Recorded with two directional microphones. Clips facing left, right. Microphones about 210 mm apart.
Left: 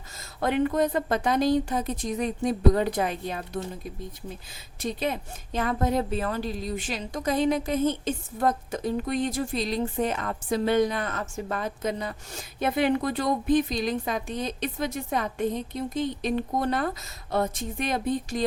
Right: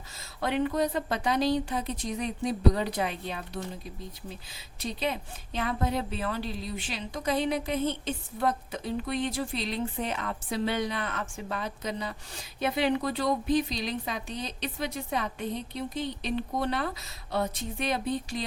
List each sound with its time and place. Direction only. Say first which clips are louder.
0.2 s a woman's voice: left 4 dB; 50° left (ahead or behind)